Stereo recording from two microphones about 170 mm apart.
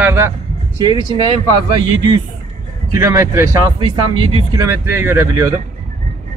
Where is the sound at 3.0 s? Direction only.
20° right (ahead or behind).